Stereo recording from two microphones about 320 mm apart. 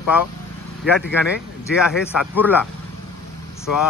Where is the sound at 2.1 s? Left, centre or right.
Centre.